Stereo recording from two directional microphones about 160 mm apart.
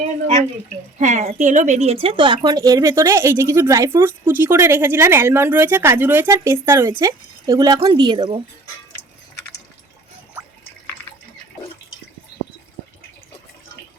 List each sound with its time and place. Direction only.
0.9 s speech: 50° right (ahead or behind); by 8.4 s 30° right (ahead or behind)